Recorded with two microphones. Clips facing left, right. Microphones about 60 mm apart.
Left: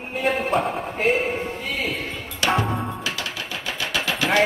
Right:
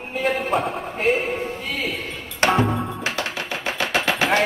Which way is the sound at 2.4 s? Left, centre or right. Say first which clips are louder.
Right 3 dB; right.